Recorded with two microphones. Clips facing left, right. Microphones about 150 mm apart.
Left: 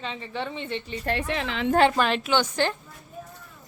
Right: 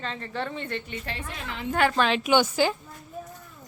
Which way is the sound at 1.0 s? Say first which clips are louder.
Left 8 dB; 70° left (ahead or behind).